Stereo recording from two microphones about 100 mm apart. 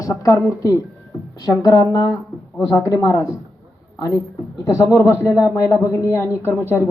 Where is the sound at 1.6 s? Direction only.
40° left (ahead or behind).